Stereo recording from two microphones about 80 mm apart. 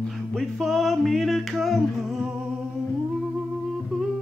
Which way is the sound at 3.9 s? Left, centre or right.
Centre.